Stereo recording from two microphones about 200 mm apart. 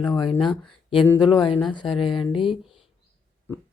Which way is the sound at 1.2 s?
20° left (ahead or behind).